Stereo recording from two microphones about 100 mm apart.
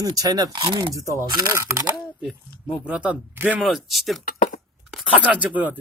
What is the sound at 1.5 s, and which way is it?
Speech, 30° right (ahead or behind).